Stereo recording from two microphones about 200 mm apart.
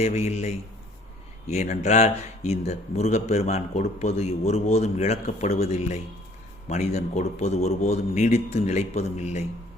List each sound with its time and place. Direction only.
0.0 s a man's voice: 35° left (ahead or behind)